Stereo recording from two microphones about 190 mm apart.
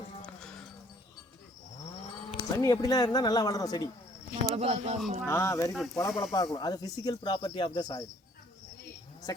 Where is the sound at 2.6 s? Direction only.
20° left (ahead or behind).